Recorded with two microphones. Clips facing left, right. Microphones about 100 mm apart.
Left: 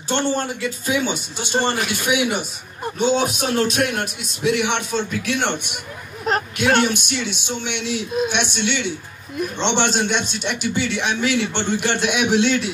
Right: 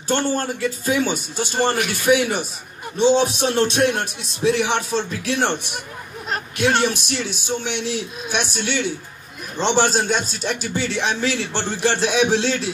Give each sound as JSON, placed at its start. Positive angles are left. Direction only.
{"t": 0.1, "sound": "speech", "side_deg": 20}
{"t": 0.4, "sound": "speech", "side_deg": -40}